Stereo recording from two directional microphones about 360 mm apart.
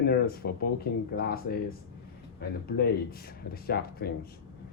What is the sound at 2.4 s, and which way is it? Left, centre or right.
Speech, left.